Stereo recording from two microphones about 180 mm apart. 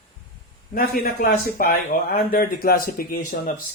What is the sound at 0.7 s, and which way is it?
Speech, 55° left (ahead or behind).